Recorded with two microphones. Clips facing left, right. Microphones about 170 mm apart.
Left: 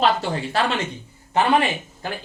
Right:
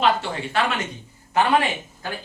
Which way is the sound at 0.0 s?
35° left (ahead or behind).